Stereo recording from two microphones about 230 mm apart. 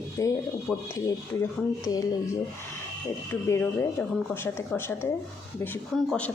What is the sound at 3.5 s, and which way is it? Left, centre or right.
A woman's voice, centre.